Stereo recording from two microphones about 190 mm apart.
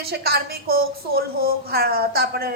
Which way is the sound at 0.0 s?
55° right (ahead or behind).